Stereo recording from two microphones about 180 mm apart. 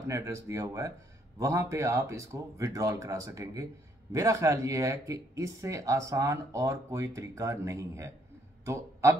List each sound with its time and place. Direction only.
0.0 s speech: 15° right (ahead or behind)